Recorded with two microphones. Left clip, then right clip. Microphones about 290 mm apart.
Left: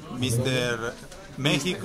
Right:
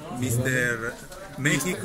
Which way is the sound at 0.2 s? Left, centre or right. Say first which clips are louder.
Right 1 dB; left.